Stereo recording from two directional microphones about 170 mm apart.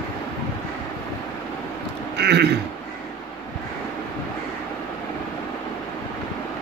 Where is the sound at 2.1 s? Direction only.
80° right.